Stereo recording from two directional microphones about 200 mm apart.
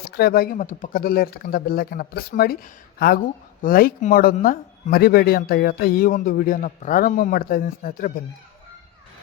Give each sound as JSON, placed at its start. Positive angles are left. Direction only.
{"t": 0.0, "sound": "speech", "side_deg": 50}
{"t": 3.6, "sound": "speech", "side_deg": 45}